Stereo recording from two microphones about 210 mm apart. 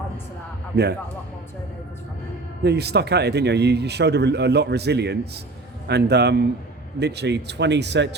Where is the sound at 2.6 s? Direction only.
50° right (ahead or behind).